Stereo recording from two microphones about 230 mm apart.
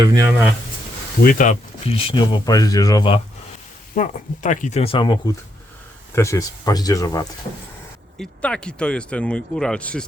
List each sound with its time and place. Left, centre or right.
0.0 s speech: centre
0.3 s speech: centre
1.2 s speech: left; by 3.2 s centre
3.9 s speech: left; by 7.3 s centre
8.2 s speech: centre